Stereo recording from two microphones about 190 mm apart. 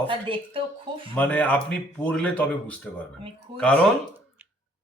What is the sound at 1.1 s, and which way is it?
A man's voice, 5° left (ahead or behind).